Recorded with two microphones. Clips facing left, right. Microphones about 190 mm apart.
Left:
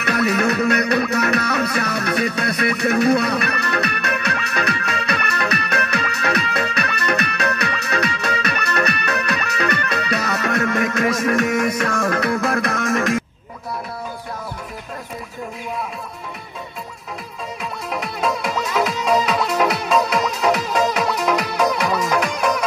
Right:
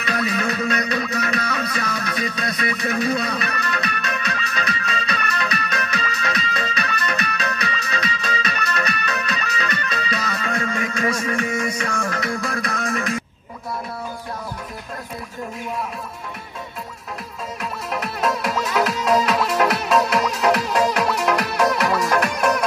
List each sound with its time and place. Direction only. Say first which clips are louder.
0.0 s music: left 5 dB; 65° left (ahead or behind)
11.6 s music: left 5 dB; 50° left (ahead or behind)
17.9 s music: even; centre (ahead or behind)